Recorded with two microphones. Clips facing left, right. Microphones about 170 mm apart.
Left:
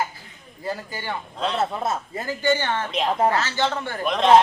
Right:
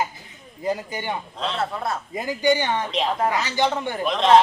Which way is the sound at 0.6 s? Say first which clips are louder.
Right 4 dB; 20° right (ahead or behind).